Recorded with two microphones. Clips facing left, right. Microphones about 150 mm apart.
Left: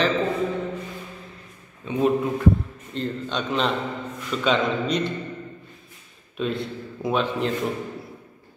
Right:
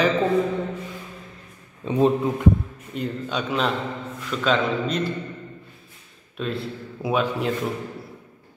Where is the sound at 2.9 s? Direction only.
10° right (ahead or behind).